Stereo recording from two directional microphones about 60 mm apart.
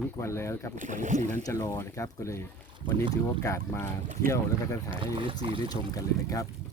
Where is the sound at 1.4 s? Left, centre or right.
Left.